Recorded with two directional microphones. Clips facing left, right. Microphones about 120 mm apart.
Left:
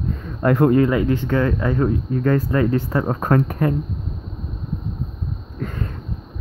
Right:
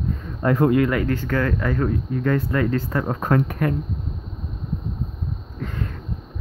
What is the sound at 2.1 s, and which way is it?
Speech, 40° left (ahead or behind).